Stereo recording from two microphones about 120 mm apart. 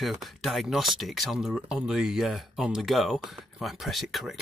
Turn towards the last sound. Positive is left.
turn(degrees=0)  # may be behind; listen again after turning